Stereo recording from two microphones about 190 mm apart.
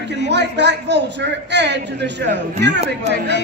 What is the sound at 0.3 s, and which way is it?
A man's voice, 65° right (ahead or behind).